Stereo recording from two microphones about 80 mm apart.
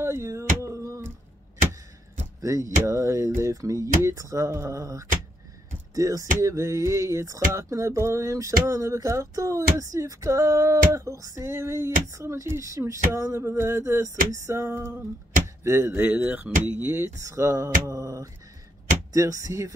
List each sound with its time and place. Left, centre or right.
0.0 s a sound: right
2.4 s music: right
16.0 s music: centre; by 18.3 s right
19.1 s speech: right